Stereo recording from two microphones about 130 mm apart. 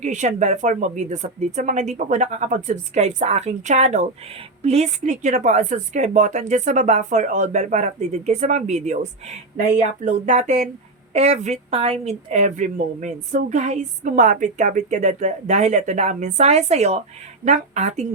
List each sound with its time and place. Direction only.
0.0 s speech: 65° right (ahead or behind)
5.2 s speech: 70° right (ahead or behind)